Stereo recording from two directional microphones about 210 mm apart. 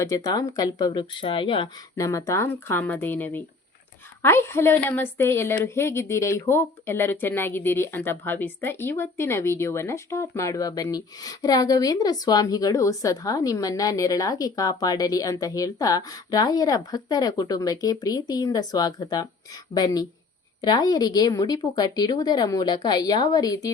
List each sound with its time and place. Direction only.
0.0 s speech: 15° left (ahead or behind)